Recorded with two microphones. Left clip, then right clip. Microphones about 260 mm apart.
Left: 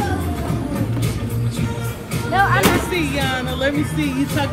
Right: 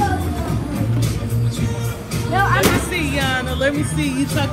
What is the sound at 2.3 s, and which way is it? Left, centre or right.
Music, left.